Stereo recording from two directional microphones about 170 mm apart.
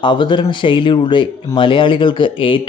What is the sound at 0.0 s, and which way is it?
Speech, 25° left (ahead or behind).